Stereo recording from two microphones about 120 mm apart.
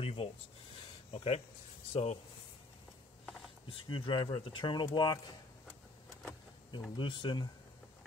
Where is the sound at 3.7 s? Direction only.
45° left (ahead or behind).